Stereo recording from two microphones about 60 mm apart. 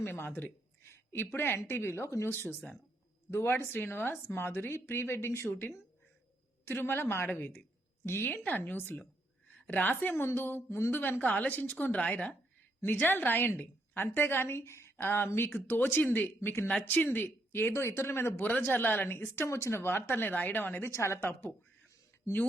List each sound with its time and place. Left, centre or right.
0.0 s speech: left
7.3 s a woman's voice: left
10.7 s speech: left
10.9 s a woman's voice: left
12.8 s a woman's voice: left
17.8 s speech: left
18.4 s speech: left
19.3 s speech: left
20.9 s speech: left